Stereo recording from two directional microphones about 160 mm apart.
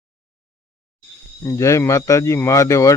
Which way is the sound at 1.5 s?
20° left (ahead or behind).